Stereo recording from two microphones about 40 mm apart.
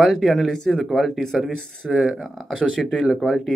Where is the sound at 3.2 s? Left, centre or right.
Centre.